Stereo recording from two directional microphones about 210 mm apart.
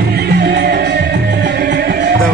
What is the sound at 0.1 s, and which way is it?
Music, 50° right (ahead or behind).